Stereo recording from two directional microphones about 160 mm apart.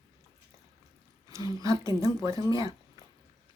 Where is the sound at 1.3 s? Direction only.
20° right (ahead or behind).